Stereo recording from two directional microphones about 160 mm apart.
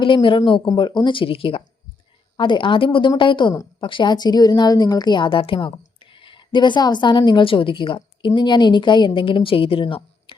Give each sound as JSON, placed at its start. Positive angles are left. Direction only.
{"t": 0.0, "sound": "a woman's voice", "side_deg": 30}